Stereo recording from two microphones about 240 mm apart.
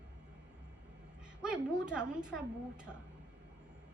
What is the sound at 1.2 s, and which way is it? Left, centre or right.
A woman's voice, centre.